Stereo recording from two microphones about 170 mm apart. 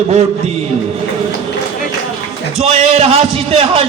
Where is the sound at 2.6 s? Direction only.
35° right (ahead or behind).